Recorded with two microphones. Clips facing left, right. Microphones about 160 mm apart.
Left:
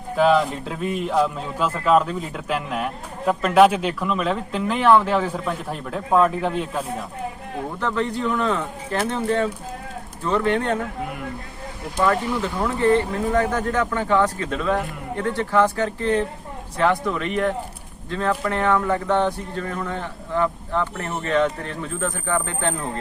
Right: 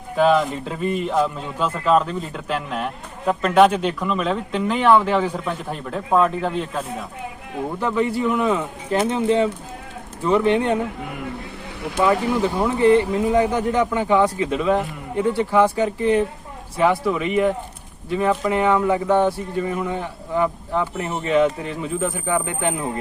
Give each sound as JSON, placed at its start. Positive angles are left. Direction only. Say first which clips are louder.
{"t": 0.2, "sound": "speech", "louder": "right 1 dB", "side_deg": 0}
{"t": 7.8, "sound": "speech", "louder": "right 3 dB", "side_deg": -10}
{"t": 11.0, "sound": "speech", "louder": "left 1 dB", "side_deg": 0}
{"t": 11.9, "sound": "speech", "louder": "right 2 dB", "side_deg": -15}